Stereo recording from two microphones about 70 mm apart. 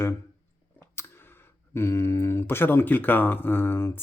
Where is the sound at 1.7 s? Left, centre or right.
Left.